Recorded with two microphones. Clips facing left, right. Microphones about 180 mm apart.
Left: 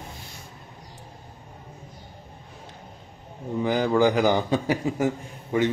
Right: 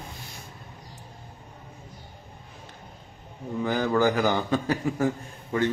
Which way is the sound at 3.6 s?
10° left (ahead or behind).